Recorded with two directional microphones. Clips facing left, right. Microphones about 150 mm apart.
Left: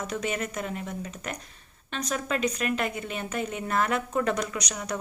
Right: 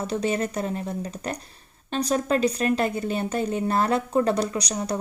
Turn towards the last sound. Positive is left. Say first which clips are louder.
# right 5 dB
turn(degrees=-30)  # may be behind; listen again after turning